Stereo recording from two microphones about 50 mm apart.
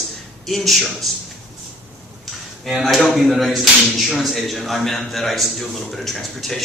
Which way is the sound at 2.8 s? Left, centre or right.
Centre.